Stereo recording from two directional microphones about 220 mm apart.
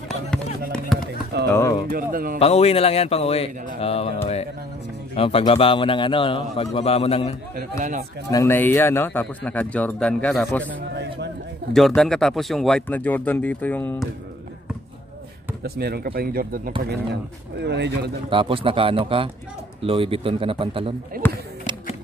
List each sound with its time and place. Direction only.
0.3 s music: 5° left (ahead or behind)
0.9 s a sound: centre (ahead or behind)
1.5 s a sound: 15° left (ahead or behind)
1.9 s a man's voice: 40° right (ahead or behind)
2.3 s a man's voice: 25° left (ahead or behind)
5.1 s a man's voice: 25° left (ahead or behind)
8.3 s speech: 15° left (ahead or behind)
11.7 s speech: centre (ahead or behind)
15.6 s speech: 45° right (ahead or behind)
18.3 s a man's voice: 25° right (ahead or behind)